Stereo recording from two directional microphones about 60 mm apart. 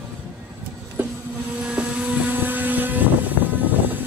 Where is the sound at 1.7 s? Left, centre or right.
Right.